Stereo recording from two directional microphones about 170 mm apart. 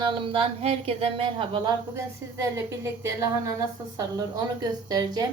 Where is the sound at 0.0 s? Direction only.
30° right (ahead or behind).